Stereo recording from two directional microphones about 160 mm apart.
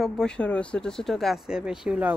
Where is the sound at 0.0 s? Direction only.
5° left (ahead or behind).